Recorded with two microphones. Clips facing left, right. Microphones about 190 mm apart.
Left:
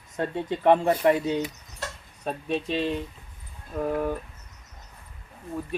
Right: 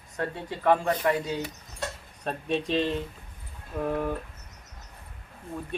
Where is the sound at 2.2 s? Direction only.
Centre (ahead or behind).